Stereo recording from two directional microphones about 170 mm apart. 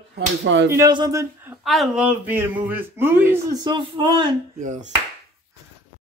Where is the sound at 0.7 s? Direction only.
20° right (ahead or behind).